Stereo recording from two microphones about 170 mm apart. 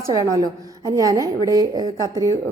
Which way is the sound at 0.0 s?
20° right (ahead or behind).